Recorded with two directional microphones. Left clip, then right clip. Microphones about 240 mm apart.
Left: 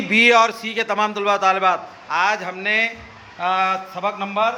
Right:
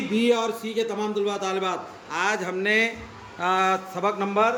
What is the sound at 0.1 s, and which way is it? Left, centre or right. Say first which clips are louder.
A man's voice: left 10 dB; centre.